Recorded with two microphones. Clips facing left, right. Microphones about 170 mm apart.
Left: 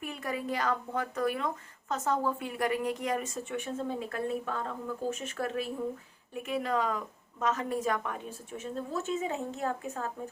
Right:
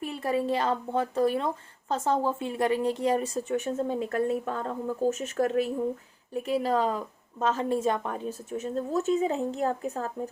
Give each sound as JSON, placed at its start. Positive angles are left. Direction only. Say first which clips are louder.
{"t": 0.0, "sound": "a woman's voice", "louder": "right 7 dB", "side_deg": -30}